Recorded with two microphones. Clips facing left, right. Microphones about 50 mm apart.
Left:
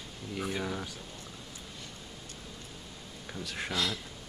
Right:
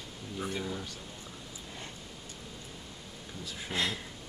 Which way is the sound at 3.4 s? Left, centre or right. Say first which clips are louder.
Left 5 dB; left.